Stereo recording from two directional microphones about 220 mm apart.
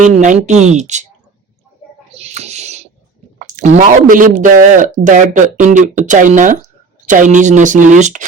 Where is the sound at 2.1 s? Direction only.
30° right (ahead or behind).